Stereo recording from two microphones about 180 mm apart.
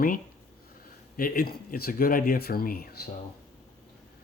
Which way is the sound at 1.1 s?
55° left (ahead or behind).